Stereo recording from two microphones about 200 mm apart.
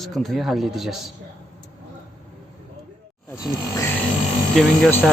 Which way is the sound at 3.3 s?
15° left (ahead or behind).